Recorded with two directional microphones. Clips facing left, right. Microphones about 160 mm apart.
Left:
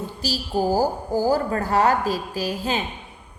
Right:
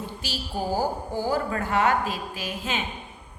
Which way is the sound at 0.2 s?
40° left (ahead or behind).